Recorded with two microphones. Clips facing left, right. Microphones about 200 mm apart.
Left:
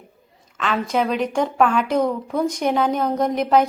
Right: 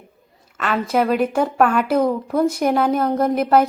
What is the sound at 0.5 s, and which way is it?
A woman's voice, 5° right (ahead or behind).